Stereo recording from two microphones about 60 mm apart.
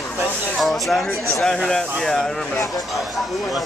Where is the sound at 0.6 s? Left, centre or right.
Centre.